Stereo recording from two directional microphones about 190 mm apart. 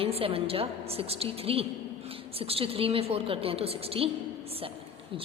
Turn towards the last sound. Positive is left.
turn(degrees=-30)  # may be behind; listen again after turning